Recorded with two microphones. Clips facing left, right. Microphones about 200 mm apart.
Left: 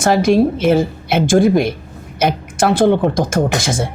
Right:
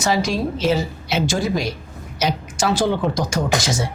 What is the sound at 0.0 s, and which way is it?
A woman's voice, 55° left (ahead or behind).